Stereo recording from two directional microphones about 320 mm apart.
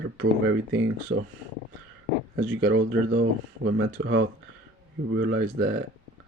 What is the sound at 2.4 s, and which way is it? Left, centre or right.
Speech, right.